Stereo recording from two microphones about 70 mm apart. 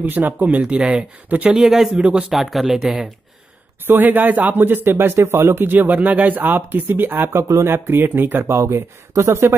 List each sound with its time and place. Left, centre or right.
0.0 s speech: right
0.6 s speech: centre
1.6 s speech: centre
2.0 s speech: centre
2.3 s speech: centre
3.8 s speech: right
5.7 s speech: right